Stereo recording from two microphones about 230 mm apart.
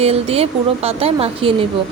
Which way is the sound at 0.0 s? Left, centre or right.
Right.